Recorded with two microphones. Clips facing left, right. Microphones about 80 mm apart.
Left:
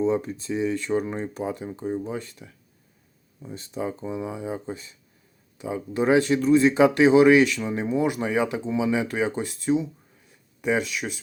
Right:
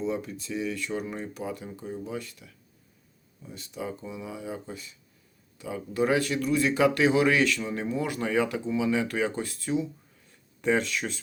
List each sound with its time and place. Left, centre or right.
0.0 s speech: left
10.6 s speech: centre